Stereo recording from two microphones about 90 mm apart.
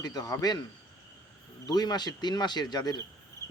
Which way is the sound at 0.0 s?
45° left (ahead or behind).